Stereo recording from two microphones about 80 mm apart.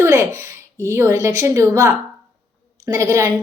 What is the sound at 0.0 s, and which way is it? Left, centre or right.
A woman's voice, right.